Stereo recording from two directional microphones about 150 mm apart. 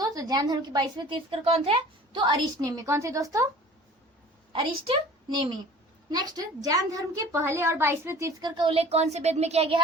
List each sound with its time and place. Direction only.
0.0 s a woman's voice: 25° right (ahead or behind)
5.3 s a woman's voice: 30° right (ahead or behind)